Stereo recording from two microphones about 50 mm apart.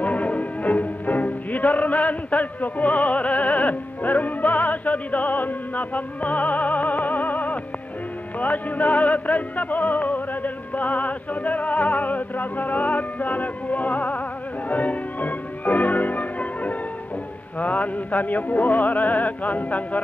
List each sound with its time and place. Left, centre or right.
0.0 s music: left